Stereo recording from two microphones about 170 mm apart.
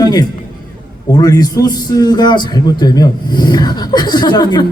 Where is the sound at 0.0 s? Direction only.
25° left (ahead or behind).